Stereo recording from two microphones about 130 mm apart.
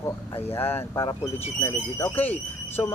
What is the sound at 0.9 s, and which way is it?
Speech, 40° left (ahead or behind).